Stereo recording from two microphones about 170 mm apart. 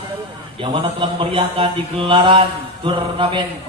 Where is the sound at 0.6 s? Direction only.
30° right (ahead or behind).